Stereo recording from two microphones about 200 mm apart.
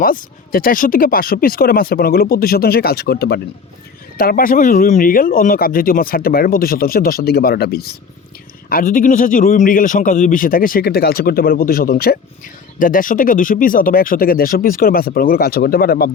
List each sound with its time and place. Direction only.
0.0 s speech: 45° left (ahead or behind)